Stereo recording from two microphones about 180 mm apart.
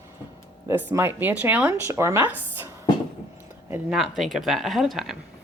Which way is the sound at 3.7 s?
5° right (ahead or behind).